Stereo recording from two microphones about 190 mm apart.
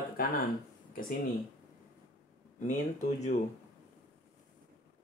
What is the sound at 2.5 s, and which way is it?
Speech, 40° left (ahead or behind).